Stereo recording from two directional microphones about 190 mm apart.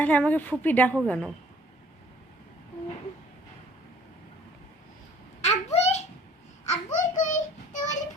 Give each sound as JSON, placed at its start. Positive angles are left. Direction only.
{"t": 0.0, "sound": "a woman's voice", "side_deg": 10}
{"t": 5.4, "sound": "babbling", "side_deg": 35}
{"t": 6.7, "sound": "a sound", "side_deg": 40}
{"t": 7.7, "sound": "child singing", "side_deg": 40}